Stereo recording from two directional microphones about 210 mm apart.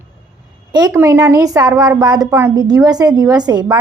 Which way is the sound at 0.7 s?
20° right (ahead or behind).